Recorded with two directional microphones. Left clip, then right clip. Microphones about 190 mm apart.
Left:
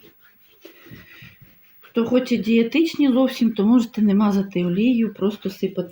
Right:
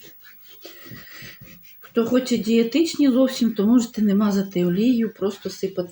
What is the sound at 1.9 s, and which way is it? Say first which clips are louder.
Speech: left 1 dB; 40° left (ahead or behind).